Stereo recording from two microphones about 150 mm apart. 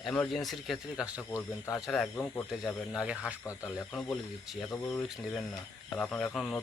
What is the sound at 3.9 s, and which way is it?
Speech, centre (ahead or behind).